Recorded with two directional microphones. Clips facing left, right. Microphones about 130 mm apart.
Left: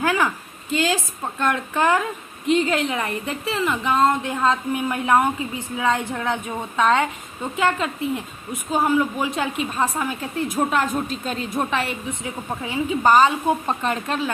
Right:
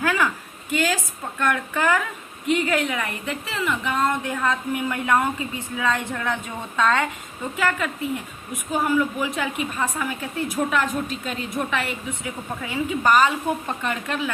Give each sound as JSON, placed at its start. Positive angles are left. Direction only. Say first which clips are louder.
{"t": 0.0, "sound": "a woman's voice", "louder": "left 2 dB", "side_deg": 20}